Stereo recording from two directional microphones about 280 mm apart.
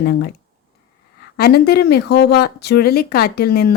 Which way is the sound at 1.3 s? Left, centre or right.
Left.